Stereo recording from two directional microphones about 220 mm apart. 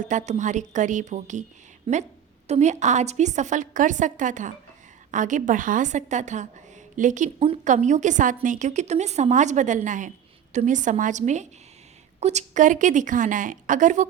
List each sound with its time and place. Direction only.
0.0 s a woman's voice: 35° right (ahead or behind)